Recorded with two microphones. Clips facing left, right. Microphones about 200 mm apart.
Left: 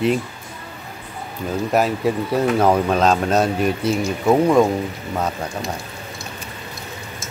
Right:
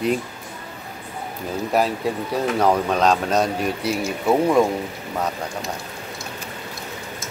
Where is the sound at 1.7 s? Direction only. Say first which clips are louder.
Left 2 dB; centre (ahead or behind).